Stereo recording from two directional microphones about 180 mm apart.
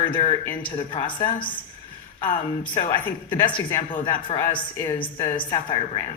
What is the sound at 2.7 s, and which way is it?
A woman's voice, 25° left (ahead or behind).